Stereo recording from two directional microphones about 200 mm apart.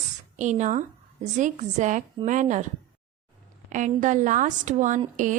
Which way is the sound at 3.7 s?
40° right (ahead or behind).